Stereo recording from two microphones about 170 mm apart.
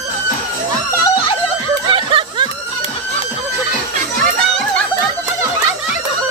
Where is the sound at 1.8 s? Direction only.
30° right (ahead or behind).